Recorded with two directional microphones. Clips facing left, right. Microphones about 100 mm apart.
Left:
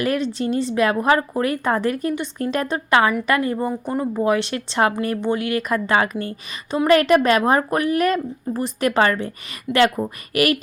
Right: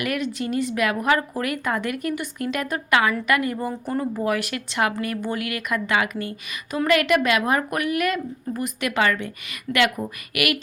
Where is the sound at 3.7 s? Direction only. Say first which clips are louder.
Left 3 dB; 15° left (ahead or behind).